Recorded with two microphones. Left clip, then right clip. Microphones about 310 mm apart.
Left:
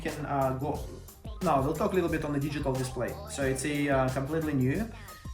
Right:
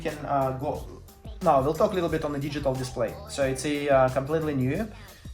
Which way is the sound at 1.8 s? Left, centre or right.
Right.